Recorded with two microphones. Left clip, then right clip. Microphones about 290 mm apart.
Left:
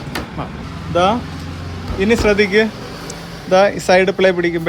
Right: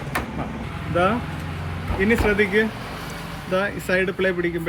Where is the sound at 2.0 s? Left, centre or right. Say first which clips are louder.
Left 6 dB; centre.